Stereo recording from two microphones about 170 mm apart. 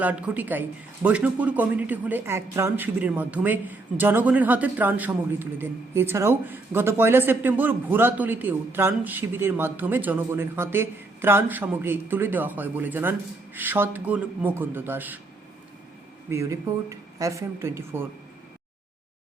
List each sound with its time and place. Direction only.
0.0 s speech: 10° right (ahead or behind)
16.3 s speech: 15° right (ahead or behind)